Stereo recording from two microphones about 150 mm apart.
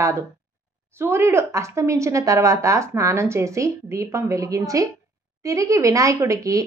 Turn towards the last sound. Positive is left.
turn(degrees=-20)  # may be behind; listen again after turning